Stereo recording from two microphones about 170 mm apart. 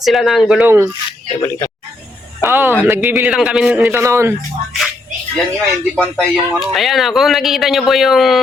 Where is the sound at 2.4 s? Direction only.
10° right (ahead or behind).